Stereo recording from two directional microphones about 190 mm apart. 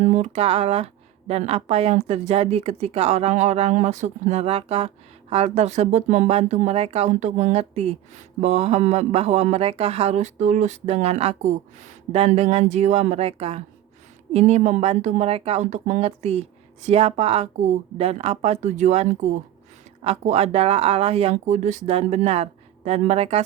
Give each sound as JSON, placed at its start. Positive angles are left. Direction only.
{"t": 0.0, "sound": "speech", "side_deg": -35}